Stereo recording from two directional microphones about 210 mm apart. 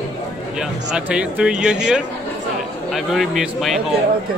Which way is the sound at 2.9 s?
Centre (ahead or behind).